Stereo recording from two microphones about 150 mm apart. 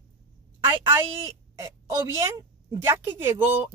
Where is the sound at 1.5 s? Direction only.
20° right (ahead or behind).